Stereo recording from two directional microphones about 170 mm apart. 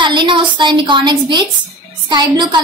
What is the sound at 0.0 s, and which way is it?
A woman's voice, 30° right (ahead or behind).